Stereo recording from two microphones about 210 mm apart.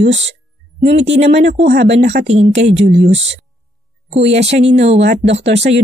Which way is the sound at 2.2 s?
30° right (ahead or behind).